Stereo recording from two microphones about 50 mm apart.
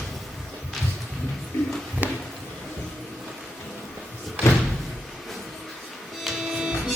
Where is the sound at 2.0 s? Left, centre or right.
Right.